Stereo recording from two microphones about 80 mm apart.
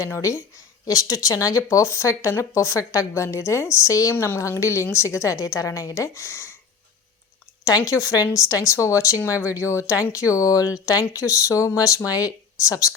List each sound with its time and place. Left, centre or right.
0.0 s speech: left
7.9 s speech: left
9.1 s speech: centre
9.5 s speech: left